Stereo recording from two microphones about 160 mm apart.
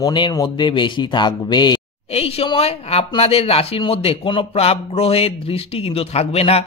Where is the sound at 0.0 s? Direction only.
25° left (ahead or behind).